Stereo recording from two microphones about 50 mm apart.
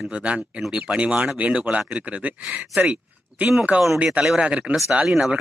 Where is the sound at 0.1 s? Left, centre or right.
Right.